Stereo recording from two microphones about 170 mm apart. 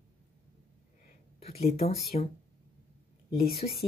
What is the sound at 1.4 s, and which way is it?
Speech, 35° left (ahead or behind).